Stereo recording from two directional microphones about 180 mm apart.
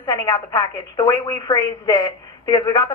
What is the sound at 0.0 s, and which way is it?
A woman's voice, 20° left (ahead or behind).